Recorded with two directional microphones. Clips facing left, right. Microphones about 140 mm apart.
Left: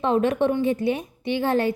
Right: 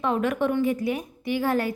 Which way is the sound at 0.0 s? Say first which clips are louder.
Left 4 dB; 25° left (ahead or behind).